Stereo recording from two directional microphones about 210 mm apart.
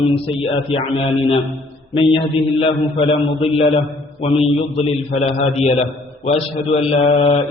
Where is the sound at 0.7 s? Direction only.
25° left (ahead or behind).